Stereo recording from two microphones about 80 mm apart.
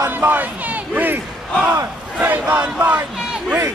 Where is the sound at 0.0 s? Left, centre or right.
Right.